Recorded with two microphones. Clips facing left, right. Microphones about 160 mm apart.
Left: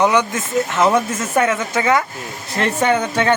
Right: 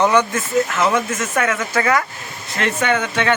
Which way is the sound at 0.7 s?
30° left (ahead or behind).